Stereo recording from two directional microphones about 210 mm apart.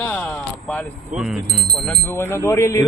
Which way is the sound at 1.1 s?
Centre (ahead or behind).